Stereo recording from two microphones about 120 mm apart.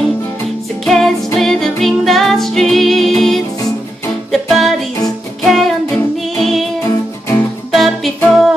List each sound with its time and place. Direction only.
0.8 s music: centre (ahead or behind)
6.9 s music: 20° left (ahead or behind)
7.7 s music: centre (ahead or behind)